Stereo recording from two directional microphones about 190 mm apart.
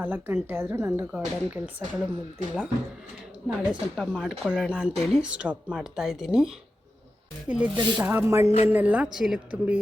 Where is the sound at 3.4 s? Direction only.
5° right (ahead or behind).